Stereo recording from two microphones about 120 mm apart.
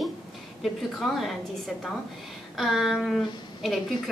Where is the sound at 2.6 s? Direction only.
Centre (ahead or behind).